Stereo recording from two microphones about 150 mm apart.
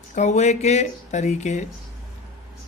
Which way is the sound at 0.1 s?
50° left (ahead or behind).